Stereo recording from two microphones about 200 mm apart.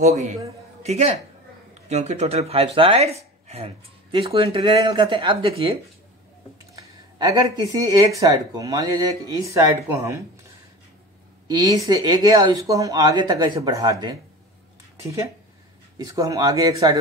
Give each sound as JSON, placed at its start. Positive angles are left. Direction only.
{"t": 0.0, "sound": "speech", "side_deg": -35}
{"t": 11.4, "sound": "speech", "side_deg": -20}
{"t": 16.0, "sound": "speech", "side_deg": -20}